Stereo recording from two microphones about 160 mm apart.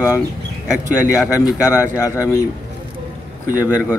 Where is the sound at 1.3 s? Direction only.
20° left (ahead or behind).